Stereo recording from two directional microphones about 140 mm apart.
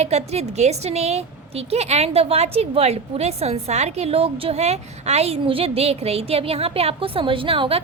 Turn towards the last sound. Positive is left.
turn(degrees=-40)  # may be behind; listen again after turning